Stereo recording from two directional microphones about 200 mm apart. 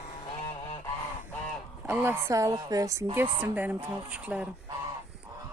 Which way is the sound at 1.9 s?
10° right (ahead or behind).